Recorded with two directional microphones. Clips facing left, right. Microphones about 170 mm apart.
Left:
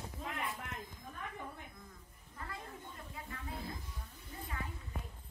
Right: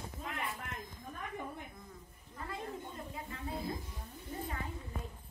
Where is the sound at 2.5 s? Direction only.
25° right (ahead or behind).